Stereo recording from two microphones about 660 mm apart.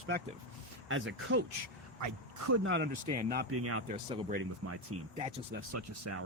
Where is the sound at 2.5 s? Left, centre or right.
Centre.